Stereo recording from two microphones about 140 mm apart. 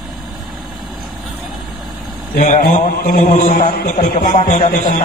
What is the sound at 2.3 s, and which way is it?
Chant, 80° left.